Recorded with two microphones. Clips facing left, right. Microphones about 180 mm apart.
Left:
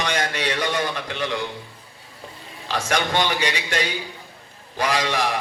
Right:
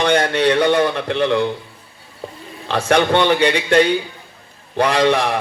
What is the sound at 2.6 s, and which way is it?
A man's voice, 60° right (ahead or behind).